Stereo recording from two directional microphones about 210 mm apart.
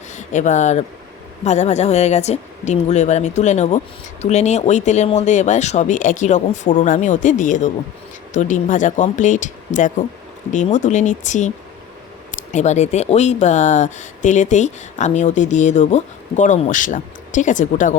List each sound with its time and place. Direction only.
0.1 s speech: 35° left (ahead or behind)